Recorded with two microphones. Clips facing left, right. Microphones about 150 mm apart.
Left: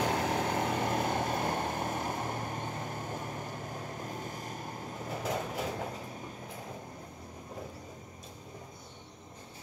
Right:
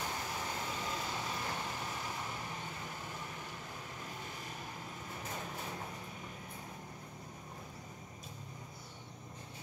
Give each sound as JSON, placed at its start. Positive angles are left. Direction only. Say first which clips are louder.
{"t": 0.0, "sound": "vehicle", "louder": "left 11 dB", "side_deg": 70}
{"t": 5.2, "sound": "vehicle", "louder": "left 10 dB", "side_deg": 90}